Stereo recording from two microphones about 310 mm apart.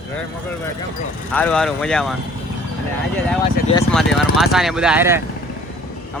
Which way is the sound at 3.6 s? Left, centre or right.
Left.